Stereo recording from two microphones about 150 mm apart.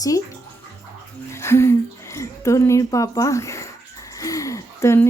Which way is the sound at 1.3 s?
15° left (ahead or behind).